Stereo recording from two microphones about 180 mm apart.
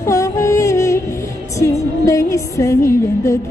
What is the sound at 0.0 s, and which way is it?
Music, 20° left (ahead or behind).